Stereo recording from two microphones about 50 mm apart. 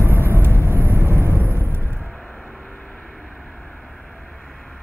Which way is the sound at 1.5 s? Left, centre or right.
Right.